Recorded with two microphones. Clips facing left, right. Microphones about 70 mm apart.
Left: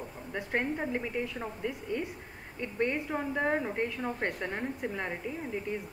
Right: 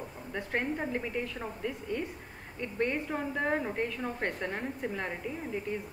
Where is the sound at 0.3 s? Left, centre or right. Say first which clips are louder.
Left 1 dB; centre.